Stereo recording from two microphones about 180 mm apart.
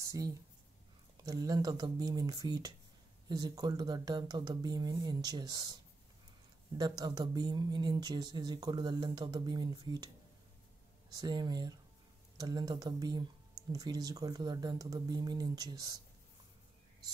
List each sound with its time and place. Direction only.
0.0 s speech: 20° right (ahead or behind)
6.8 s speech: 20° right (ahead or behind)
11.1 s speech: 20° right (ahead or behind)